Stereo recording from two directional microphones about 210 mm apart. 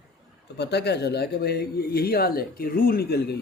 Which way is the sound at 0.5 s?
50° left (ahead or behind).